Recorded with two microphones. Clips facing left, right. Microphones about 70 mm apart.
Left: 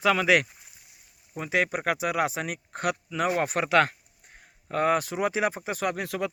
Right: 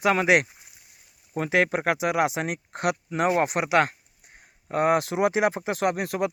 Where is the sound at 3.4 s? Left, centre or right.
Centre.